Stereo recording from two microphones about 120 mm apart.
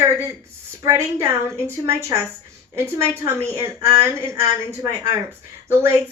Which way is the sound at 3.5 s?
25° right (ahead or behind).